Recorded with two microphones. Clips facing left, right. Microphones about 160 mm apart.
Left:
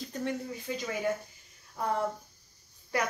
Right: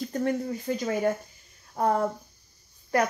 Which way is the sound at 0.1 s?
50° right (ahead or behind).